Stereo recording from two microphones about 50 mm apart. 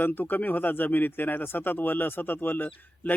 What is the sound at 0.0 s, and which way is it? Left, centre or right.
Speech, left.